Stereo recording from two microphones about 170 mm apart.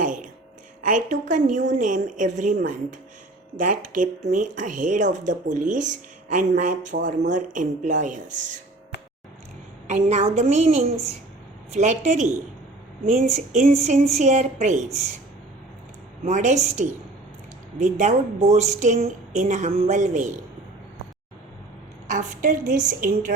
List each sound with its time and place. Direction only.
0.0 s a sound: 50° right (ahead or behind)
0.9 s speech: 50° right (ahead or behind)
9.9 s a woman's voice: 45° right (ahead or behind)
16.2 s speech: 45° right (ahead or behind)
17.8 s speech: 45° right (ahead or behind)
22.1 s speech: 50° right (ahead or behind)